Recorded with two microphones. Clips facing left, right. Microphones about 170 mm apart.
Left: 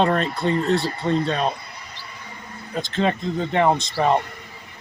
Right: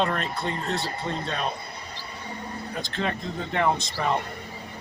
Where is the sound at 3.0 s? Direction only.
25° left (ahead or behind).